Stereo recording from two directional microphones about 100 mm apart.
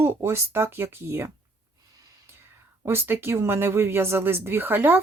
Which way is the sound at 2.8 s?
20° right (ahead or behind).